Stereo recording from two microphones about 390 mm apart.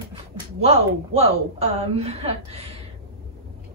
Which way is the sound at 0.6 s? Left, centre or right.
Centre.